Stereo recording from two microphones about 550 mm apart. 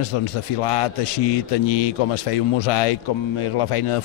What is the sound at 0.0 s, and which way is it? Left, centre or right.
A man's voice, left.